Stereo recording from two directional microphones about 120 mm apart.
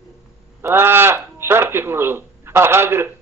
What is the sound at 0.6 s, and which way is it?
Speech, 20° right (ahead or behind).